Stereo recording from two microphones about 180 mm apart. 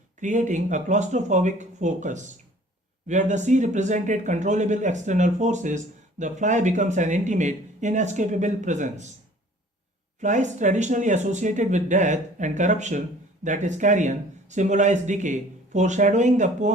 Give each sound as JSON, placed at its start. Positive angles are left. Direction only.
{"t": 0.2, "sound": "speech", "side_deg": -45}
{"t": 10.2, "sound": "speech", "side_deg": -40}